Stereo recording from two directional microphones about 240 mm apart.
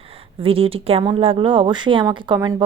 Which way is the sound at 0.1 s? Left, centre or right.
Right.